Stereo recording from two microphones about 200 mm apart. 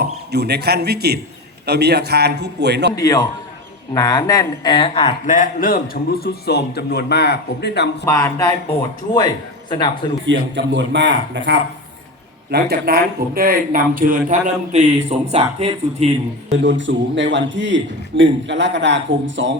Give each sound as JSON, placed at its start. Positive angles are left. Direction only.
{"t": 0.3, "sound": "a man's voice", "side_deg": -55}
{"t": 2.9, "sound": "a man's voice", "side_deg": 20}
{"t": 8.0, "sound": "a man's voice", "side_deg": 10}
{"t": 10.2, "sound": "a man's voice", "side_deg": -65}
{"t": 16.5, "sound": "a man's voice", "side_deg": -65}